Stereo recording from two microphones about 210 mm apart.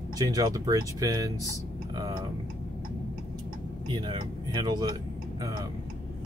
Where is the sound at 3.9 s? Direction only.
20° right (ahead or behind).